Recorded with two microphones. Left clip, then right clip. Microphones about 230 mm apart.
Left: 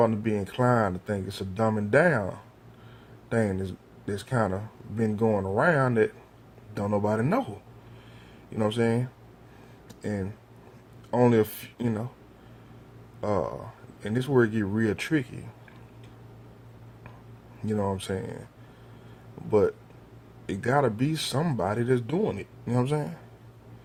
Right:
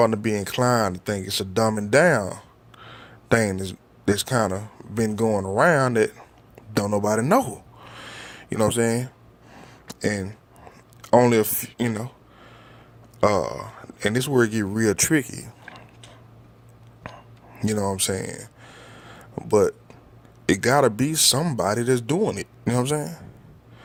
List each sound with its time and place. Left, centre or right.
0.0 s speech: right
8.1 s a sound: right
10.0 s speech: right
13.2 s speech: right
17.6 s speech: right
19.5 s speech: right